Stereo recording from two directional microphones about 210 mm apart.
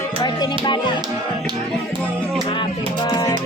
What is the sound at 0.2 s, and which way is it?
Music, 20° left (ahead or behind).